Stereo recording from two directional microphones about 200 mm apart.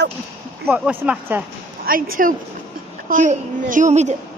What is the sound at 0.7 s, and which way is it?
Speech, 5° right (ahead or behind).